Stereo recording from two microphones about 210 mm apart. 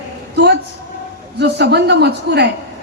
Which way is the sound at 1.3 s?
55° right (ahead or behind).